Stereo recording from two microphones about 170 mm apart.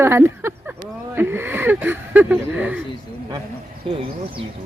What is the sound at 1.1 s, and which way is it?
Speech, 15° right (ahead or behind).